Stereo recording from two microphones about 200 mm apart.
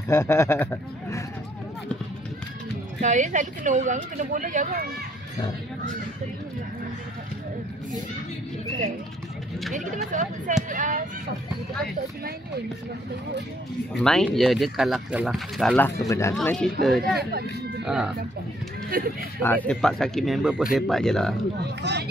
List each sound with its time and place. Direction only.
0.1 s speech: 15° left (ahead or behind)
3.0 s speech: 40° right (ahead or behind)
10.7 s speech: 40° right (ahead or behind)
13.9 s speech: 5° left (ahead or behind)
16.1 s speech: 15° left (ahead or behind)
16.3 s speech: 5° left (ahead or behind)
17.2 s speech: 50° right (ahead or behind)
17.8 s speech: 5° right (ahead or behind)
18.9 s speech: 50° right (ahead or behind)
19.4 s speech: 10° left (ahead or behind)
21.5 s speech: 55° right (ahead or behind)